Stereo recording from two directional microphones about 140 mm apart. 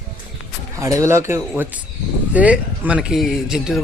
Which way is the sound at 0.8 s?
20° right (ahead or behind).